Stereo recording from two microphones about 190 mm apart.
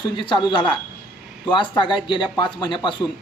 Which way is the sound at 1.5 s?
25° left (ahead or behind).